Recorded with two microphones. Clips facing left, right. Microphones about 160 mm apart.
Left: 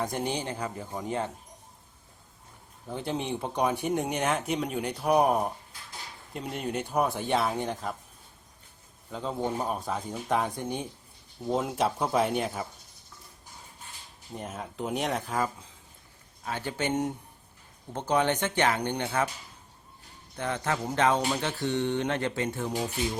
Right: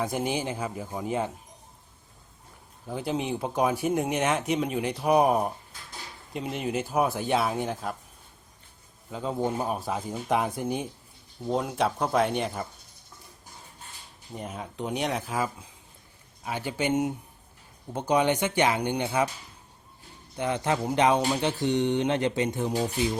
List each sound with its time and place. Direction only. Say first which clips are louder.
0.0 s speech: right 2 dB; 5° right (ahead or behind)
2.8 s speech: right 2 dB; 5° right (ahead or behind)
9.0 s speech: right 2 dB; 5° right (ahead or behind)
14.3 s speech: right 1 dB; centre (ahead or behind)
16.4 s speech: right 2 dB; 15° right (ahead or behind)
20.3 s speech: right 3 dB; 15° right (ahead or behind)